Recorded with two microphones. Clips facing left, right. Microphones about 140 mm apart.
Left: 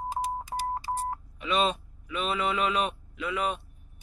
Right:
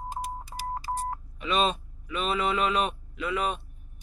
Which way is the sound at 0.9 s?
10° left (ahead or behind).